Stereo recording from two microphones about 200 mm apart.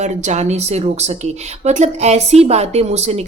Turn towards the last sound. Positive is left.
turn(degrees=-35)  # may be behind; listen again after turning